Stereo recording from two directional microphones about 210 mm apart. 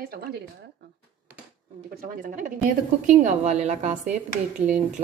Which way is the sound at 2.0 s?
40° right (ahead or behind).